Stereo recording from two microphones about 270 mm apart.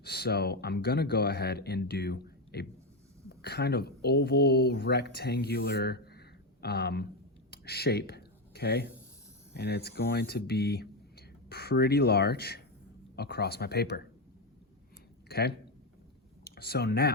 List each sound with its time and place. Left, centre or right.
0.0 s speech: left
7.5 s a sound: left
9.6 s speech: left
15.3 s speech: left